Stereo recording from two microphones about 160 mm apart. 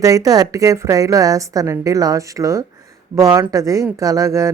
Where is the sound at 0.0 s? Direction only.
20° right (ahead or behind).